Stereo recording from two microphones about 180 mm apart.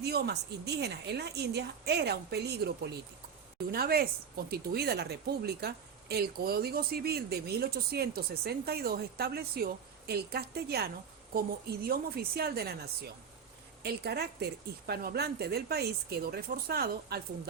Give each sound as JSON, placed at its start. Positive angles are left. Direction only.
{"t": 0.0, "sound": "speech", "side_deg": -65}